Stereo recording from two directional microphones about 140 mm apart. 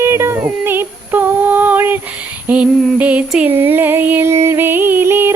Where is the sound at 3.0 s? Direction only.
10° right (ahead or behind).